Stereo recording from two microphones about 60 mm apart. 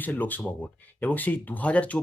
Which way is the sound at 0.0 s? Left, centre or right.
Left.